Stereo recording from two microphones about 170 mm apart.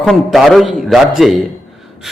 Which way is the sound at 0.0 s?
Centre (ahead or behind).